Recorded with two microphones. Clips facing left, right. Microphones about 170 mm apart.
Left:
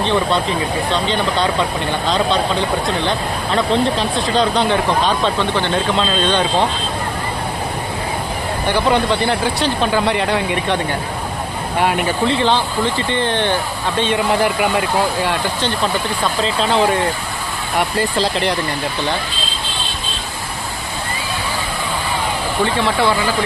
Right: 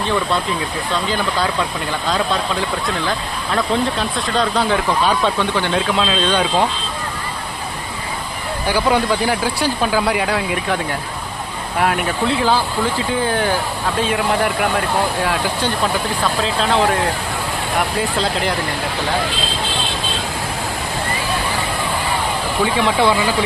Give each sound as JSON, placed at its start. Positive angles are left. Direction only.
{"t": 1.0, "sound": "speech", "side_deg": -5}
{"t": 8.6, "sound": "speech", "side_deg": -10}
{"t": 11.8, "sound": "speech", "side_deg": 0}
{"t": 22.6, "sound": "speech", "side_deg": -15}